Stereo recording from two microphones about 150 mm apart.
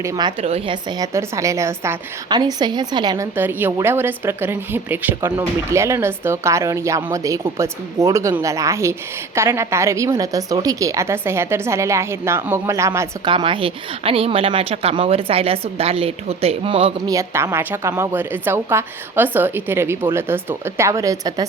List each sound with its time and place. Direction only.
0.0 s a woman's voice: 25° right (ahead or behind)
0.4 s a woman's voice: 40° right (ahead or behind)
0.9 s a woman's voice: 25° right (ahead or behind)
3.3 s a woman's voice: 15° right (ahead or behind)
13.2 s speech: 35° right (ahead or behind)
17.1 s a woman's voice: 20° right (ahead or behind)